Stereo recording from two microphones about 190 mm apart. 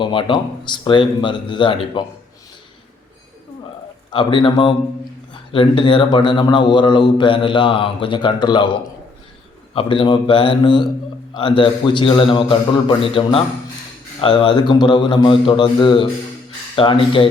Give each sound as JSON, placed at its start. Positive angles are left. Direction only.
{"t": 0.0, "sound": "speech", "side_deg": 25}
{"t": 4.1, "sound": "speech", "side_deg": 25}
{"t": 9.7, "sound": "speech", "side_deg": 25}